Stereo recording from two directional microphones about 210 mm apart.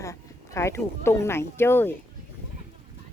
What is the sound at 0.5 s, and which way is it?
Speech, 15° left (ahead or behind).